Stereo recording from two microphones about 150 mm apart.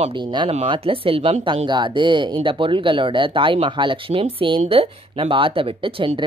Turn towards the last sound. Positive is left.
turn(degrees=-35)  # may be behind; listen again after turning